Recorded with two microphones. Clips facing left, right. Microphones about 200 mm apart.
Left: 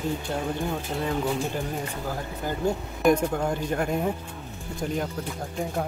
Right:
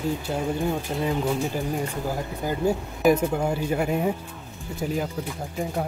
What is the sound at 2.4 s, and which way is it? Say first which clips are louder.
Speech: right 2 dB; 10° right (ahead or behind).